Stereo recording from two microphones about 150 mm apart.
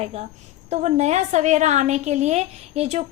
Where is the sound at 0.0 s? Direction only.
45° right (ahead or behind).